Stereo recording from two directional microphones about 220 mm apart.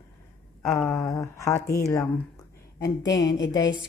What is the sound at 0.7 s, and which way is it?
Speech, 10° left (ahead or behind).